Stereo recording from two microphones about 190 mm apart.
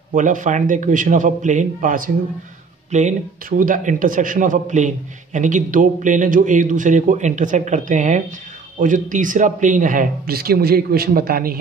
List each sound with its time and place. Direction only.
0.1 s a man's voice: 40° right (ahead or behind)